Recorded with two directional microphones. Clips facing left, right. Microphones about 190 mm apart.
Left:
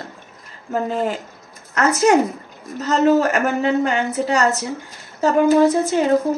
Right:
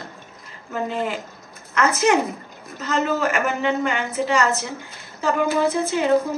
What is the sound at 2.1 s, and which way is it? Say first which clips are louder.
A woman's voice: left 4 dB; 40° left (ahead or behind).